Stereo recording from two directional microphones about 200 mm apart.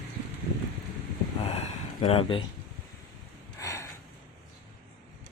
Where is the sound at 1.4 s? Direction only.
30° left (ahead or behind).